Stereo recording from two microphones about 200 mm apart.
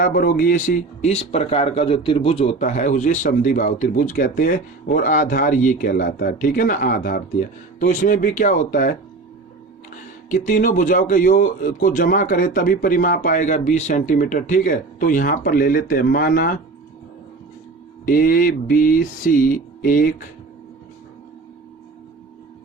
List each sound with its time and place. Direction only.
0.0 s speech: 45° left (ahead or behind)
1.0 s speech: 30° left (ahead or behind)
10.2 s speech: 40° left (ahead or behind)
18.0 s speech: 45° left (ahead or behind)